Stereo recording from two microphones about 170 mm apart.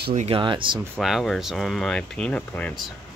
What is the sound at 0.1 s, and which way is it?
Speech, 40° right (ahead or behind).